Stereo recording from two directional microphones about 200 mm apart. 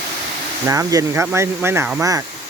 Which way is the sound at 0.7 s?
15° right (ahead or behind).